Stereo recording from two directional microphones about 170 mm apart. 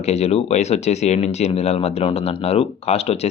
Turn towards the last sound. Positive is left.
turn(degrees=35)  # may be behind; listen again after turning